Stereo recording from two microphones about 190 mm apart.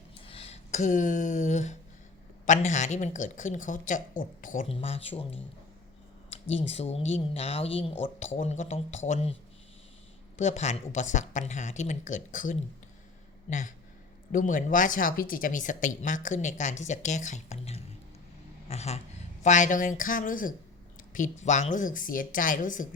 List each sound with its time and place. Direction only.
0.3 s a woman's voice: 30° left (ahead or behind)
4.7 s a woman's voice: 30° left (ahead or behind)
10.3 s a woman's voice: 35° left (ahead or behind)